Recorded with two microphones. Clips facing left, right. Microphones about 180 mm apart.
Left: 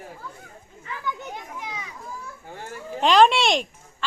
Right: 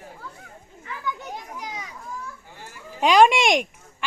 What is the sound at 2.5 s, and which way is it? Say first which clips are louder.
Speech: left 7 dB; 55° left (ahead or behind).